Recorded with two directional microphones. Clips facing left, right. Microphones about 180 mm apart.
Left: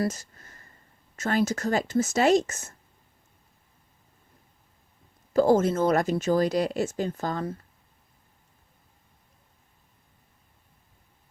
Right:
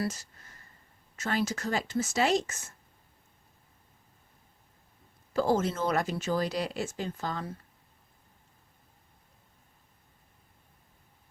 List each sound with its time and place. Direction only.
0.0 s a sound: 45° left (ahead or behind)
1.1 s speech: 45° left (ahead or behind)
5.3 s speech: 45° left (ahead or behind)